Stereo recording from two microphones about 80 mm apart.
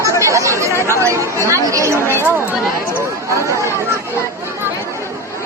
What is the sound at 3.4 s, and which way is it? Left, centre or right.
Chatter, right.